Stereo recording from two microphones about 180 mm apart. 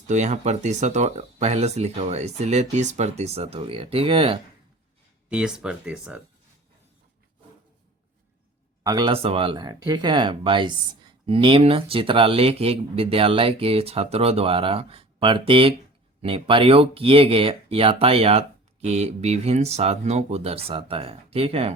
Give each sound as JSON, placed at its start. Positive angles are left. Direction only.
{"t": 0.1, "sound": "speech", "side_deg": -40}
{"t": 5.3, "sound": "speech", "side_deg": -5}
{"t": 8.8, "sound": "speech", "side_deg": -20}